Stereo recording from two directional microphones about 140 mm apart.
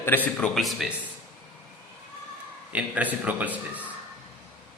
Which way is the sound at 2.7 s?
10° right (ahead or behind).